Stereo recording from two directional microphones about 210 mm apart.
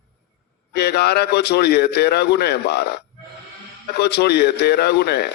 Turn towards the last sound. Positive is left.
turn(degrees=50)  # may be behind; listen again after turning